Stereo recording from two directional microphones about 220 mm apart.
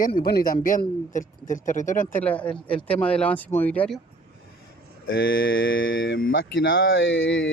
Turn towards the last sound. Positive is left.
turn(degrees=60)  # may be behind; listen again after turning